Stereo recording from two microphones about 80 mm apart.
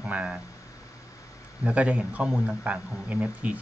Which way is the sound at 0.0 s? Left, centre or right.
Centre.